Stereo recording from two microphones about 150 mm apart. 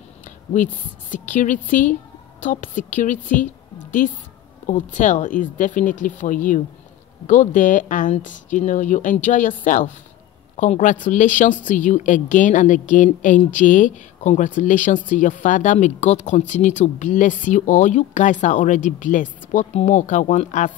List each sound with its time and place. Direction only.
1.1 s a woman's voice: 55° left (ahead or behind)